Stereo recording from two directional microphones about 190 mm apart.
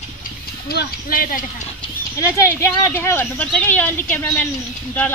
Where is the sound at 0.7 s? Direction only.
55° left (ahead or behind).